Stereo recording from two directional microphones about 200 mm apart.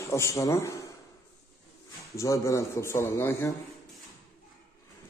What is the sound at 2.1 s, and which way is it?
Speech, 15° left (ahead or behind).